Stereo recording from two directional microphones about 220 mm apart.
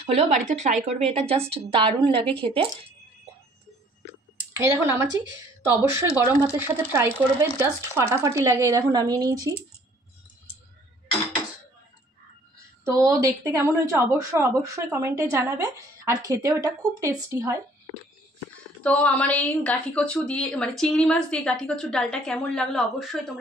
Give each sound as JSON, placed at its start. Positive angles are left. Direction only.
{"t": 0.0, "sound": "a woman's voice", "side_deg": -30}
{"t": 4.6, "sound": "a woman's voice", "side_deg": -10}
{"t": 12.5, "sound": "a woman's voice", "side_deg": -15}
{"t": 18.8, "sound": "a woman's voice", "side_deg": 5}